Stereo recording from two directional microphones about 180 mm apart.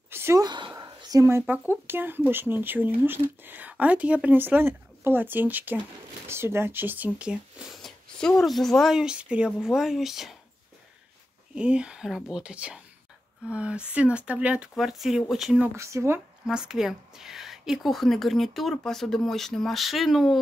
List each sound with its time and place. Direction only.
0.1 s a sound: 15° right (ahead or behind)
1.5 s a woman's voice: 10° right (ahead or behind)
11.5 s speech: 5° right (ahead or behind)
15.7 s a woman's voice: 15° right (ahead or behind)
16.4 s speech: 5° right (ahead or behind)